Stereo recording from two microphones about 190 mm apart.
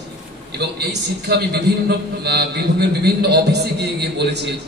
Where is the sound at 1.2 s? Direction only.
60° right (ahead or behind).